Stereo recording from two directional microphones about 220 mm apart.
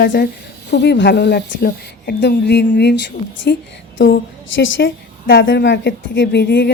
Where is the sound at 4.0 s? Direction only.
55° left (ahead or behind).